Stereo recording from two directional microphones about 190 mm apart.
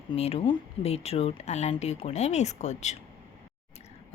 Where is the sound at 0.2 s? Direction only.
30° left (ahead or behind).